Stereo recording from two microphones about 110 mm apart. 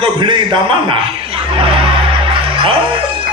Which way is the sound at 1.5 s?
55° right (ahead or behind).